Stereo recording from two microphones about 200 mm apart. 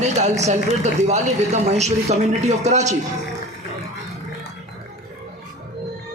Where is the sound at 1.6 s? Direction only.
35° right (ahead or behind).